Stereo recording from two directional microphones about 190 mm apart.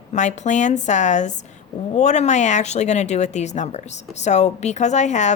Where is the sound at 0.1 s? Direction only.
40° left (ahead or behind).